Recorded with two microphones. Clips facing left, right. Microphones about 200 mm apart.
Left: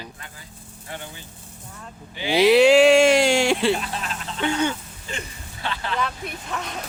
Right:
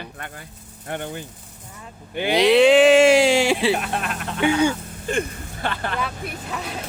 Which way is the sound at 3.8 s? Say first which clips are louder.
Right 4 dB; 60° right (ahead or behind).